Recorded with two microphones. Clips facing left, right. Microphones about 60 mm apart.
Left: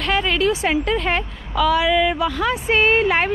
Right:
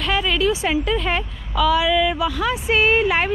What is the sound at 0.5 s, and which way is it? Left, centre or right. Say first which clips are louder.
A woman's voice: left 1 dB; left.